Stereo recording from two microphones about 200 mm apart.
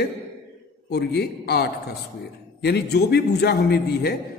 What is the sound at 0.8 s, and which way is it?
A man's voice, 55° left (ahead or behind).